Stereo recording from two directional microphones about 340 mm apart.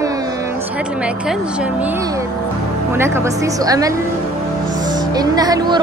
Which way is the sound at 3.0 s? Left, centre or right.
Centre.